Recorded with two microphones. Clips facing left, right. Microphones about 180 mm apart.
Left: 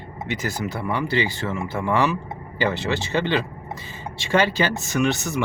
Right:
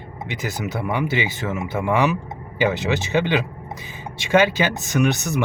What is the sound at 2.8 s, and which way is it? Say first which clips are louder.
Speech: right 2 dB; 20° right (ahead or behind).